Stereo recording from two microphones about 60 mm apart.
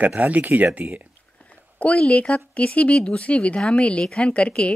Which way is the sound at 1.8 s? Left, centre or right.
Left.